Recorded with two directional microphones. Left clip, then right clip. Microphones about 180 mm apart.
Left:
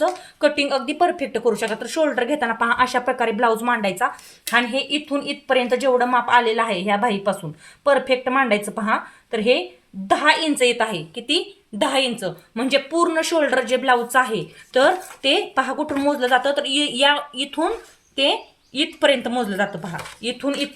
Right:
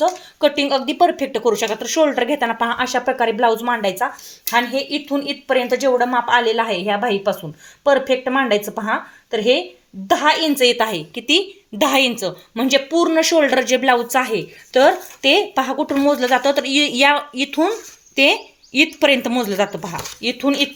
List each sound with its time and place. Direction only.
0.3 s speech: 20° right (ahead or behind)